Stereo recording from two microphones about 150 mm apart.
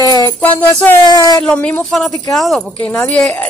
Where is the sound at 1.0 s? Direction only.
25° left (ahead or behind).